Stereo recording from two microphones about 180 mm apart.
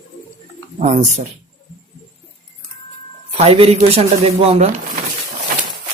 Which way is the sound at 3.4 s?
35° right (ahead or behind).